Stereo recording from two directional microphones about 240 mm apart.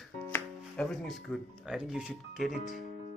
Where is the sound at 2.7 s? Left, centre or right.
Left.